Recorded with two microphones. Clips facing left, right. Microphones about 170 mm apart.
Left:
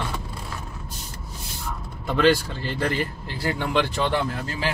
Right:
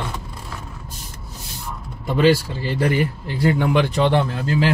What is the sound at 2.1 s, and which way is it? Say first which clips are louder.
Speech: right 3 dB; 10° right (ahead or behind).